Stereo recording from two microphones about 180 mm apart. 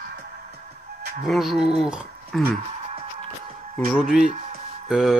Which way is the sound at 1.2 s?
Centre (ahead or behind).